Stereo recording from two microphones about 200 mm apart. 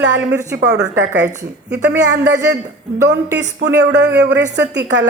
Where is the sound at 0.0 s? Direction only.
60° right (ahead or behind).